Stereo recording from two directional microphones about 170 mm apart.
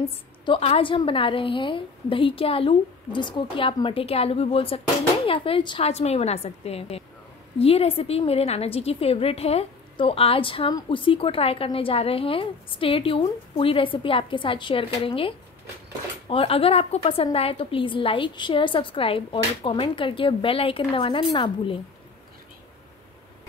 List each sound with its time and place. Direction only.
0.5 s a woman's voice: 35° left (ahead or behind)